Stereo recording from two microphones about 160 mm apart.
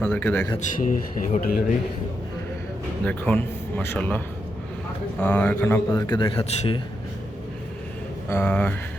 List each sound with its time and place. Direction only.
0.0 s speech: 10° left (ahead or behind)
0.6 s speech: 55° left (ahead or behind)
3.0 s speech: 10° left (ahead or behind)
5.2 s speech: 10° left (ahead or behind)
5.9 s speech: 25° left (ahead or behind)
8.3 s speech: 10° left (ahead or behind)